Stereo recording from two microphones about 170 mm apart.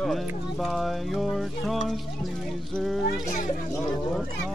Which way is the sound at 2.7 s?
Centre (ahead or behind).